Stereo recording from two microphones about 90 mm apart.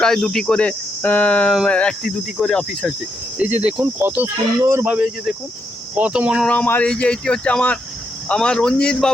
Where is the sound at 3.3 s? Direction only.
15° right (ahead or behind).